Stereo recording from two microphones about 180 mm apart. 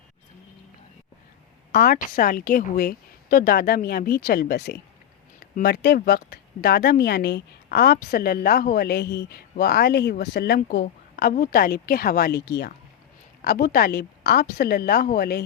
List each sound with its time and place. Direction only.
1.7 s speech: 55° left (ahead or behind)